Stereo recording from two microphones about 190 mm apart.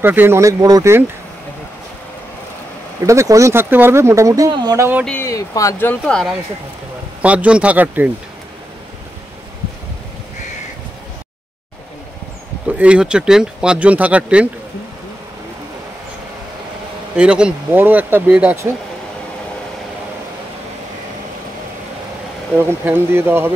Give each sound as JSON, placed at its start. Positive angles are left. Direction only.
{"t": 0.0, "sound": "speech", "side_deg": -10}
{"t": 3.1, "sound": "speech", "side_deg": -15}
{"t": 5.0, "sound": "speech", "side_deg": 10}
{"t": 7.2, "sound": "speech", "side_deg": -5}
{"t": 12.6, "sound": "speech", "side_deg": -5}
{"t": 17.2, "sound": "speech", "side_deg": -5}
{"t": 22.6, "sound": "speech", "side_deg": -10}